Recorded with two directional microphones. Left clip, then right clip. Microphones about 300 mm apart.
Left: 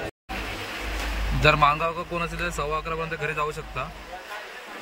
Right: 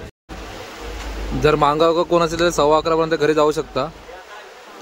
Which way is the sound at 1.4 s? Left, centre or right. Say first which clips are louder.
Right 5 dB; centre.